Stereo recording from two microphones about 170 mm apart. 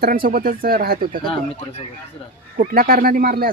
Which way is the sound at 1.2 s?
35° left (ahead or behind).